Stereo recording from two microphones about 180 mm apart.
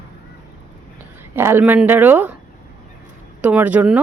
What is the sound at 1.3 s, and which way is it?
Speech, 15° right (ahead or behind).